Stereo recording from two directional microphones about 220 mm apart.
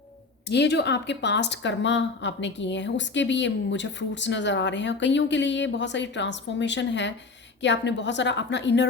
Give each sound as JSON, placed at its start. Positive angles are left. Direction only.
{"t": 0.4, "sound": "a woman's voice", "side_deg": 50}